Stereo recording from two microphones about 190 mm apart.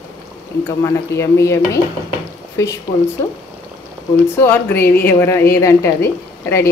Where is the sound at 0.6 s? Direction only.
15° left (ahead or behind).